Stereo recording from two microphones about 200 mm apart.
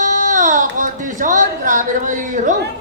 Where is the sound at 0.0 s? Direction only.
40° right (ahead or behind).